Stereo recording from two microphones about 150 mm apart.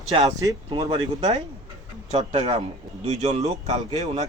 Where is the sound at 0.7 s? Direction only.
30° right (ahead or behind).